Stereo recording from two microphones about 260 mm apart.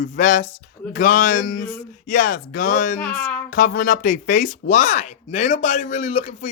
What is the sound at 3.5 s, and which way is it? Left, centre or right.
Speech, left.